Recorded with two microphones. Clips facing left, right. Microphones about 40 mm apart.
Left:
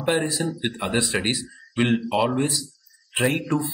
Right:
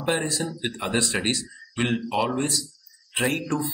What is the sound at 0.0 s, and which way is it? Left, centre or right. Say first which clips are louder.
Speech: left 3 dB; centre.